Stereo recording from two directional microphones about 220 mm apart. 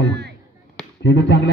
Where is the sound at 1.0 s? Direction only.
50° left (ahead or behind).